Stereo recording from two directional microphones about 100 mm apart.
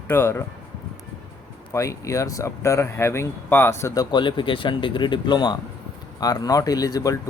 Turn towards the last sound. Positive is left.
turn(degrees=40)  # may be behind; listen again after turning